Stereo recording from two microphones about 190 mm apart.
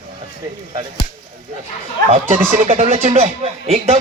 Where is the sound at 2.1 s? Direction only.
30° right (ahead or behind).